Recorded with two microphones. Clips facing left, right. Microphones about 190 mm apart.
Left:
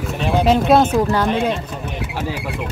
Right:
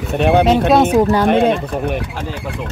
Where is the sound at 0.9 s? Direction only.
15° right (ahead or behind).